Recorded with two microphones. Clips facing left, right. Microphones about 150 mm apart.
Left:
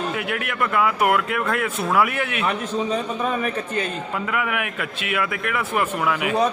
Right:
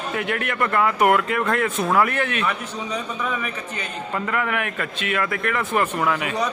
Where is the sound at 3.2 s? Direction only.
45° left (ahead or behind).